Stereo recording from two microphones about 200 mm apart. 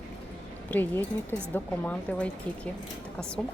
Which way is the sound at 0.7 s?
10° left (ahead or behind).